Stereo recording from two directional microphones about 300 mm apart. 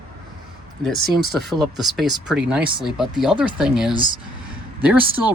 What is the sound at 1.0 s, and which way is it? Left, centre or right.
Speech, right.